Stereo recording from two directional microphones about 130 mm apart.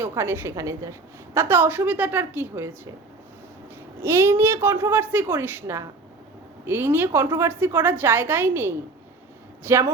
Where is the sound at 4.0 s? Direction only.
20° right (ahead or behind).